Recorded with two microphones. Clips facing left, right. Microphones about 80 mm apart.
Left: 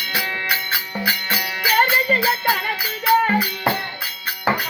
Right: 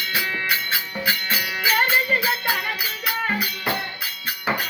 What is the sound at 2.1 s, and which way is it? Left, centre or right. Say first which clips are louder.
Music: left 4 dB; left.